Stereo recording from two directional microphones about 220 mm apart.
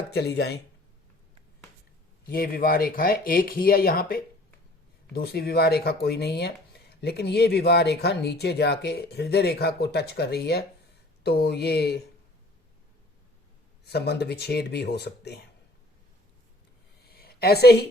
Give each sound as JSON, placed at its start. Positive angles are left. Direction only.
{"t": 0.1, "sound": "speech", "side_deg": 50}
{"t": 2.2, "sound": "speech", "side_deg": 40}
{"t": 13.8, "sound": "speech", "side_deg": 50}
{"t": 17.0, "sound": "a sound", "side_deg": 45}